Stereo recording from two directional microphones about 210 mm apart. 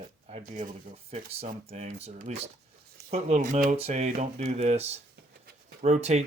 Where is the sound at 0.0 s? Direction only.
30° right (ahead or behind).